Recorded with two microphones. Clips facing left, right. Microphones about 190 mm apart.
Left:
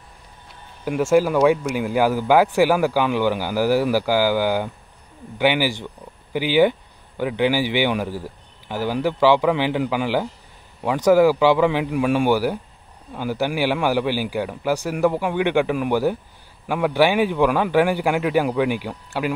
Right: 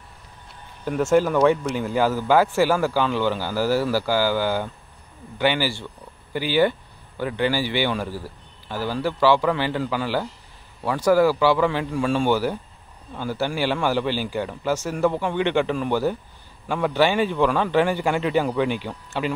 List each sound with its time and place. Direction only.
0.8 s speech: 10° left (ahead or behind)